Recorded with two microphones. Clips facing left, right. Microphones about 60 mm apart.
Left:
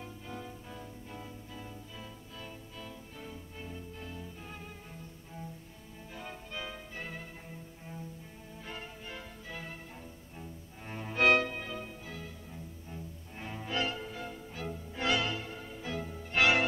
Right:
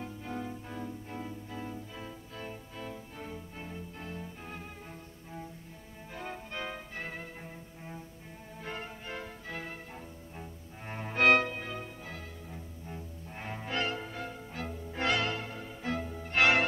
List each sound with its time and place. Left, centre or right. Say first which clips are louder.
0.2 s music: right 5 dB; right
6.5 s music: even; right
8.6 s music: right 4 dB; right
9.9 s cello: right 3 dB; right
11.6 s music: right 1 dB; right
13.7 s music: even; right